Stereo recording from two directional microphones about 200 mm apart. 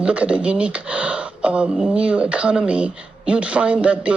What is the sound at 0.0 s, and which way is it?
Speech, 5° right (ahead or behind).